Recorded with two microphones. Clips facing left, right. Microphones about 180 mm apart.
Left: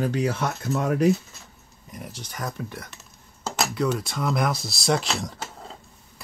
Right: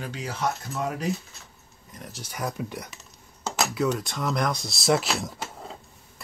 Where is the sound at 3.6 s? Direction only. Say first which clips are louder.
Left 1 dB; centre (ahead or behind).